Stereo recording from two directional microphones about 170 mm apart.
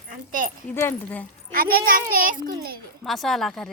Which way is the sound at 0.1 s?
50° right (ahead or behind).